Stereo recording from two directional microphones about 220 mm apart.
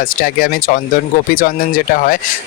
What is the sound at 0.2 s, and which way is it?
Speech, 40° left (ahead or behind).